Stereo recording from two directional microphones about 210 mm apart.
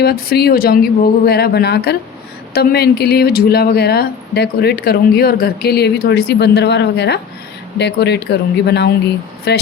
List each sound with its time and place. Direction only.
0.0 s speech: 50° left (ahead or behind)